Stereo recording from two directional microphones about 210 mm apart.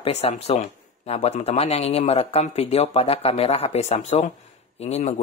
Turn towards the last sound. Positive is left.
turn(degrees=30)  # may be behind; listen again after turning